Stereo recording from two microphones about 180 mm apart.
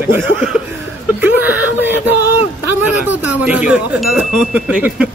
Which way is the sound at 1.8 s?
10° right (ahead or behind).